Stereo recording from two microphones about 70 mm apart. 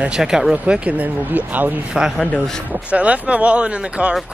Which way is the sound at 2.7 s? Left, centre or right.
Centre.